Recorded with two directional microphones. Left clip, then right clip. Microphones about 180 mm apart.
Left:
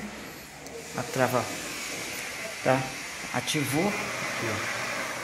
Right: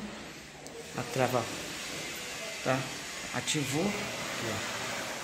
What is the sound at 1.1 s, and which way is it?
Speech, 15° right (ahead or behind).